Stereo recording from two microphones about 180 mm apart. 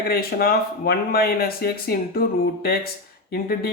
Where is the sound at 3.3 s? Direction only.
55° left (ahead or behind).